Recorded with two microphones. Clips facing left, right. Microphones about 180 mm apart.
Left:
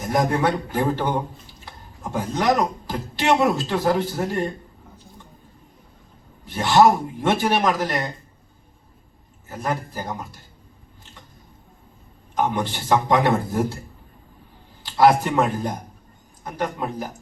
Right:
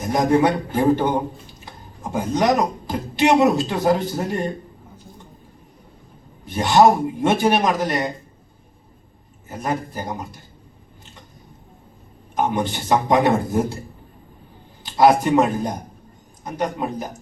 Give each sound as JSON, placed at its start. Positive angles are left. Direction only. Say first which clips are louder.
{"t": 0.1, "sound": "speech", "louder": "right 4 dB", "side_deg": -20}
{"t": 6.4, "sound": "speech", "louder": "right 1 dB", "side_deg": -20}
{"t": 9.5, "sound": "speech", "louder": "right 2 dB", "side_deg": -20}
{"t": 12.4, "sound": "speech", "louder": "right 2 dB", "side_deg": -20}
{"t": 14.8, "sound": "speech", "louder": "right 2 dB", "side_deg": -20}